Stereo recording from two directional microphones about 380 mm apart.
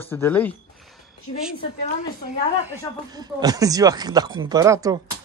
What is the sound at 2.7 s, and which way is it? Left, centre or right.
Speech, centre.